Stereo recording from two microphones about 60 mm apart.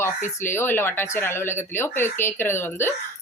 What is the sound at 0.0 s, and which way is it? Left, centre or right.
A woman's voice, left.